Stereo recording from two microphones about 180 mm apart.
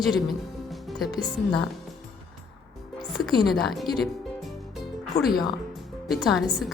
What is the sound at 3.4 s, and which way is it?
Speech, centre (ahead or behind).